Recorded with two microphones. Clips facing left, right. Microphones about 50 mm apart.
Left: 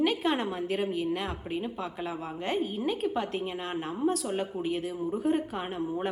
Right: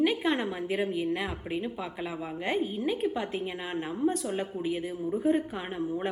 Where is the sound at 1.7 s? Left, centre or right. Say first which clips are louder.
Even; centre.